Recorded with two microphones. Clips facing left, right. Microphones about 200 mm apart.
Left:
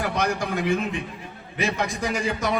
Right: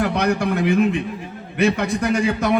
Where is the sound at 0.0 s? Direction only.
65° right (ahead or behind).